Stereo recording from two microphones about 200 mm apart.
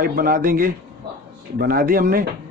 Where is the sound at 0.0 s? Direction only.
45° right (ahead or behind).